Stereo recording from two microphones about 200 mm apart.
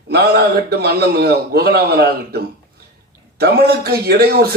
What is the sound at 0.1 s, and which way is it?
A man's voice, 55° right (ahead or behind).